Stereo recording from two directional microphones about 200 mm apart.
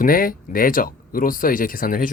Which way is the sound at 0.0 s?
45° left (ahead or behind).